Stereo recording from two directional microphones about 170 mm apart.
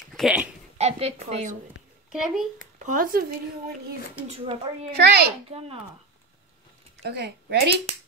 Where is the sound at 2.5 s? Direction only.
50° right (ahead or behind).